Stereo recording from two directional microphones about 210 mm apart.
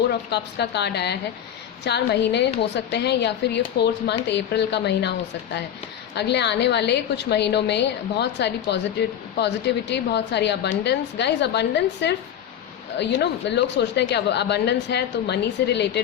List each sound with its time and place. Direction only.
0.1 s a woman's voice: 55° left (ahead or behind)
6.1 s a woman's voice: 55° left (ahead or behind)